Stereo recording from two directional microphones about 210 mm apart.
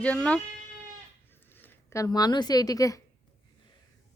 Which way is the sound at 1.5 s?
10° left (ahead or behind).